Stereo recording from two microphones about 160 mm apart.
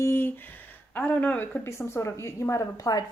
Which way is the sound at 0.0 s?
15° left (ahead or behind).